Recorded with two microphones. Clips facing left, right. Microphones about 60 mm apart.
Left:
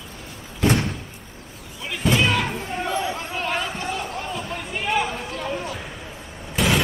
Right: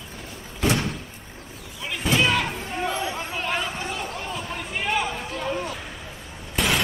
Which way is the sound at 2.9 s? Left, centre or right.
Centre.